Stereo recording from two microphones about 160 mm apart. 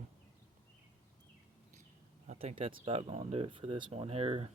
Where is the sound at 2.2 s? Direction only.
40° right (ahead or behind).